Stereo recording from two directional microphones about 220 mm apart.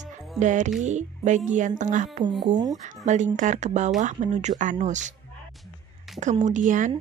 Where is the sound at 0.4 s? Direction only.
35° right (ahead or behind).